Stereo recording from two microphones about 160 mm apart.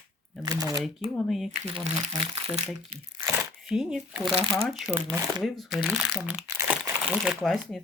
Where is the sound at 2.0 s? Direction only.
40° right (ahead or behind).